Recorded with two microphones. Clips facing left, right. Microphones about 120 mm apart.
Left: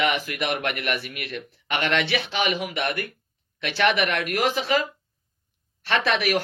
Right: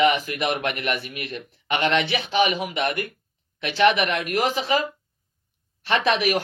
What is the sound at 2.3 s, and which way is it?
Speech, 15° right (ahead or behind).